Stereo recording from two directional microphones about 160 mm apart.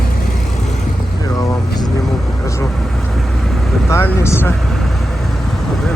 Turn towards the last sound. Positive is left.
turn(degrees=15)  # may be behind; listen again after turning